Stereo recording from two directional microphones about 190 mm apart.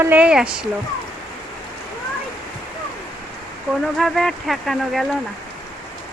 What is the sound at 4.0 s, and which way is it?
Speech, centre (ahead or behind).